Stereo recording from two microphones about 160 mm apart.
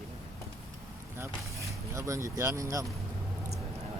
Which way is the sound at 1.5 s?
20° right (ahead or behind).